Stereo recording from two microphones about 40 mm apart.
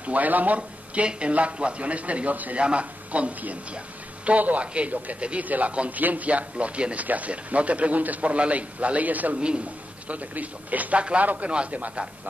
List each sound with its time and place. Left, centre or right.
0.0 s a man's voice: right
0.6 s a man's voice: right
11.0 s speech: right
11.2 s a man's voice: right